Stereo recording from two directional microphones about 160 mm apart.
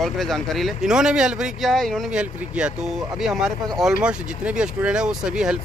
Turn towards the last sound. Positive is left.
turn(degrees=-5)  # may be behind; listen again after turning